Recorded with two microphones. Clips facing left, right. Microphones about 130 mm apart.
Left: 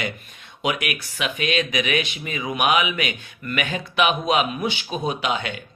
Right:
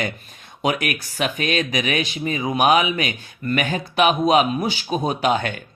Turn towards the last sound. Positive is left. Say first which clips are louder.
# right 4 dB
turn(degrees=-45)  # may be behind; listen again after turning